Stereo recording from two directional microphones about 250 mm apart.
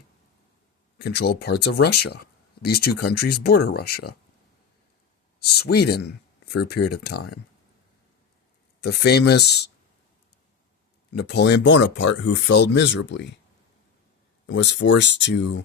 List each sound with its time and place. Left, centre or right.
0.9 s speech: left
5.4 s speech: left
8.8 s speech: left
11.2 s speech: left
14.4 s speech: left